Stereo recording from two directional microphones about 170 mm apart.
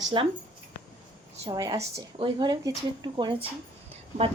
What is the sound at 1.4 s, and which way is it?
A woman's voice, 20° right (ahead or behind).